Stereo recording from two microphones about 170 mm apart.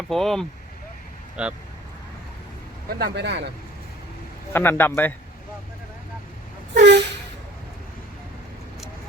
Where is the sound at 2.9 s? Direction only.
75° right (ahead or behind).